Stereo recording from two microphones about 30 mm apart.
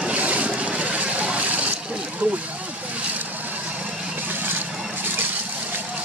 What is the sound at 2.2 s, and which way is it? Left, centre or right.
Speech, right.